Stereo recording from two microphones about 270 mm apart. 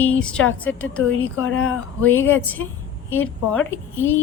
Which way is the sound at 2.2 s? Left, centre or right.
Centre.